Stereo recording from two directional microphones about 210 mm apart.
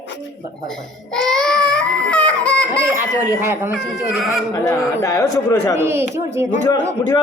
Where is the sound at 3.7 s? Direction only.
Centre (ahead or behind).